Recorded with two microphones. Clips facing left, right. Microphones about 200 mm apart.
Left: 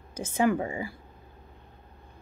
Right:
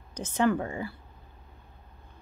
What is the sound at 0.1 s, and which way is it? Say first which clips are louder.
Speech: left 1 dB; 10° left (ahead or behind).